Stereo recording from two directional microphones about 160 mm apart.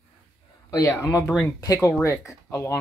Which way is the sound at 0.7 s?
20° left (ahead or behind).